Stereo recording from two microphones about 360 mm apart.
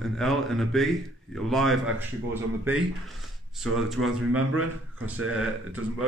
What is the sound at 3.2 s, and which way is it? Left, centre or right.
Speech, centre.